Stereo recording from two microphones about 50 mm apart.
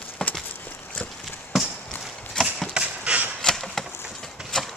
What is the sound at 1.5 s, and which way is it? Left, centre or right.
Chop, centre.